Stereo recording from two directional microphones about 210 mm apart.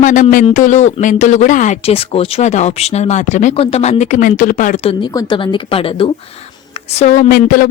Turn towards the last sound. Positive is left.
turn(degrees=45)  # may be behind; listen again after turning